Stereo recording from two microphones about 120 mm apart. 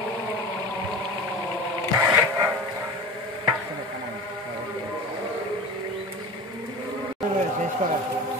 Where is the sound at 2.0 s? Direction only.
25° right (ahead or behind).